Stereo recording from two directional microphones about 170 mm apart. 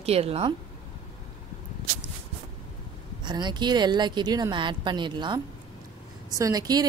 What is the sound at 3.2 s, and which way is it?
Speech, 25° right (ahead or behind).